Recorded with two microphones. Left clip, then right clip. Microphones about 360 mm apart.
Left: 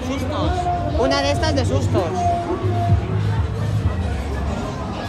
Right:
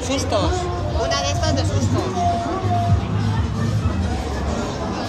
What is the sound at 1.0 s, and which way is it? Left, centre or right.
Speech, centre.